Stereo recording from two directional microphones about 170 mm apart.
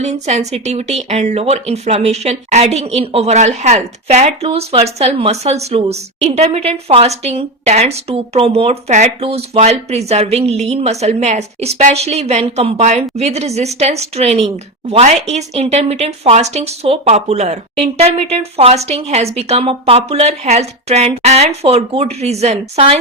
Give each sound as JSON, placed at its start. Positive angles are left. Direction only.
{"t": 0.0, "sound": "speech", "side_deg": -40}